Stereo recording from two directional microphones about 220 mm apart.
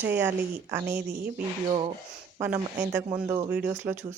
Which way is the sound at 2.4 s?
5° right (ahead or behind).